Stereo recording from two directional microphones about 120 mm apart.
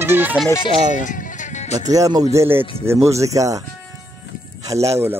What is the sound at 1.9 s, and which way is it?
Speech, 30° right (ahead or behind).